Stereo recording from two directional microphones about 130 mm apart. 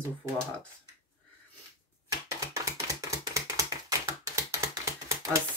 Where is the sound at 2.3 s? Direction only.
25° right (ahead or behind).